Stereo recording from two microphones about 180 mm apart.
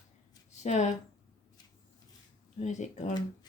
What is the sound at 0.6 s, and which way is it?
Speech, 40° left (ahead or behind).